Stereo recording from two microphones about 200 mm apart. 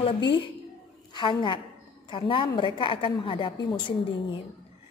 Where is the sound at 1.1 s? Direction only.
25° left (ahead or behind).